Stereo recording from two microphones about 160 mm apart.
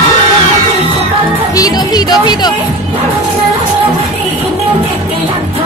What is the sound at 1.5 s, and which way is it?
Speech, 25° left (ahead or behind).